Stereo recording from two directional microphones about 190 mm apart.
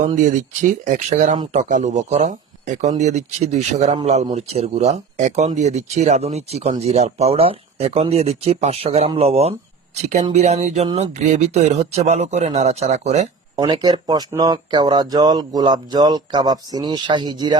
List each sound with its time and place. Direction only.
0.0 s speech: 40° right (ahead or behind)
13.6 s speech: 20° right (ahead or behind)